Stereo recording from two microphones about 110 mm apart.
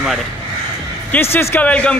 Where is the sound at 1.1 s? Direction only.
20° left (ahead or behind).